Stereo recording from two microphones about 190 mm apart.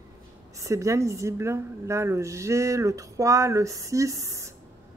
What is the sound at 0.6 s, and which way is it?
A woman's voice, 15° right (ahead or behind).